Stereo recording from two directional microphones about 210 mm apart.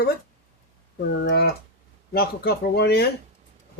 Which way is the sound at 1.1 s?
50° left (ahead or behind).